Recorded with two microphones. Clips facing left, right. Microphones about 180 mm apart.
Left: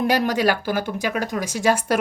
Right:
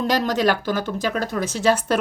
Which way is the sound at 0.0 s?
10° left (ahead or behind).